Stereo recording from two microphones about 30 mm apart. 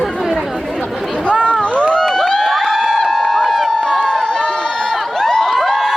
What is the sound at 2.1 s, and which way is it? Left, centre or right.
Crowd, centre.